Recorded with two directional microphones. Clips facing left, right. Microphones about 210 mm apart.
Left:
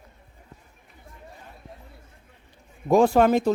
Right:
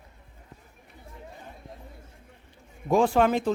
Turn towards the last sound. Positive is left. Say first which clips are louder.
# left 4 dB
turn(degrees=40)  # may be behind; listen again after turning